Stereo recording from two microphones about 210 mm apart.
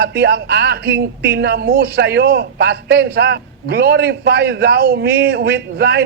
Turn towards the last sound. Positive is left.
turn(degrees=-50)  # may be behind; listen again after turning